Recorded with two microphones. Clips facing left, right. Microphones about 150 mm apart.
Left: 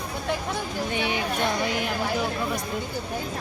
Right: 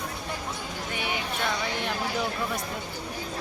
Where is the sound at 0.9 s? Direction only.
20° left (ahead or behind).